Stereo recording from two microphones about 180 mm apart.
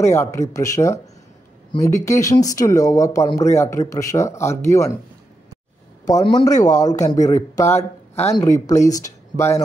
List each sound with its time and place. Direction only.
0.0 s speech: 15° left (ahead or behind)
6.0 s speech: 20° left (ahead or behind)